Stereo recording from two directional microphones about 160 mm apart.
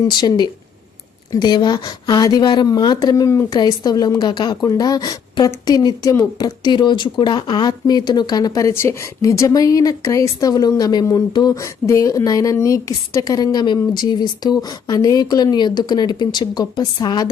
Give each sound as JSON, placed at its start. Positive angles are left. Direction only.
{"t": 0.1, "sound": "a woman's voice", "side_deg": 25}